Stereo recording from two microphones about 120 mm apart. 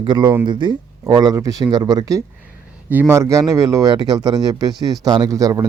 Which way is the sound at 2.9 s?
20° right (ahead or behind).